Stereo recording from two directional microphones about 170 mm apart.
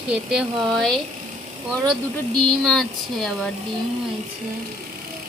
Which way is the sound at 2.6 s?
5° left (ahead or behind).